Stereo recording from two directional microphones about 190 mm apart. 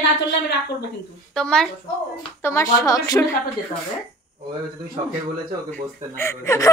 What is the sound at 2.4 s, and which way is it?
Speech, 15° left (ahead or behind).